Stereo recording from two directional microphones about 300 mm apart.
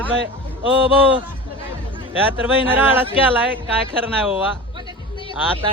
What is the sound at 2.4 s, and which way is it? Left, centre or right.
Speech, centre.